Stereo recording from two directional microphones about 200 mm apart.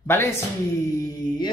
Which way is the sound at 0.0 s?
10° left (ahead or behind).